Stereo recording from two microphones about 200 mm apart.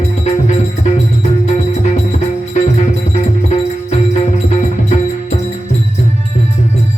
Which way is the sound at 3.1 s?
35° left (ahead or behind).